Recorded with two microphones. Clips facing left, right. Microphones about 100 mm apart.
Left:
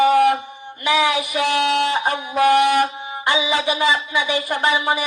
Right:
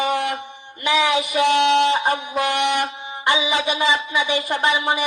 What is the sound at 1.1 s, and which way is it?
Speech, 20° right (ahead or behind).